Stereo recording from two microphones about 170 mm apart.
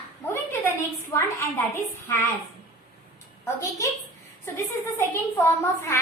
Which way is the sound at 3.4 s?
15° left (ahead or behind).